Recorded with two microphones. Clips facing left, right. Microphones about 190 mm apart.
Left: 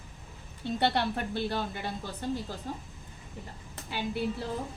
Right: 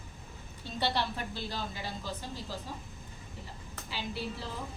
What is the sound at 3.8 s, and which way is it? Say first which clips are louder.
Speech: left 6 dB; 55° left (ahead or behind).